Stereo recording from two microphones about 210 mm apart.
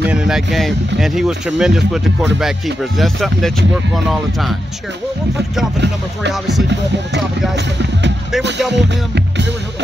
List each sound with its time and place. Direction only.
0.1 s speech: 5° right (ahead or behind)
8.7 s music: 55° right (ahead or behind)